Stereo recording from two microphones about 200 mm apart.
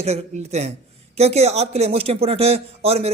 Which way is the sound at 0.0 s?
30° right (ahead or behind).